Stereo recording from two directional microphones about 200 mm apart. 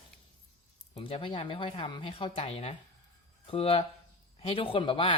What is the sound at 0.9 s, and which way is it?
Speech, 30° left (ahead or behind).